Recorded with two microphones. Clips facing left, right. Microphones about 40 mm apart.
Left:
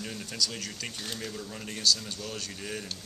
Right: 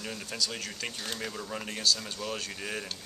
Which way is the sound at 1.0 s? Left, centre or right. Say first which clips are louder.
Right 1 dB; right.